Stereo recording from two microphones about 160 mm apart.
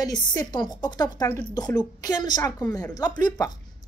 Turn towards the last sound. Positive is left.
turn(degrees=25)  # may be behind; listen again after turning